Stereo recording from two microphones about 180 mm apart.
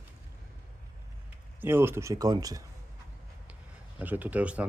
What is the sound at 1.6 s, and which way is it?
Speech, 15° right (ahead or behind).